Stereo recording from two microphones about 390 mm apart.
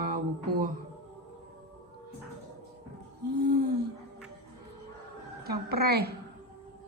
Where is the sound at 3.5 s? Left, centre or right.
Right.